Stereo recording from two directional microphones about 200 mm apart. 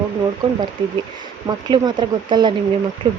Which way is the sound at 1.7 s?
20° right (ahead or behind).